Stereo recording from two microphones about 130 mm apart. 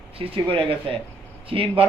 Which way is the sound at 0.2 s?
45° right (ahead or behind).